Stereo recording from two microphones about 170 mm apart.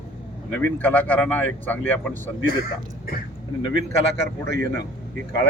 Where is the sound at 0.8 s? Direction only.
10° left (ahead or behind).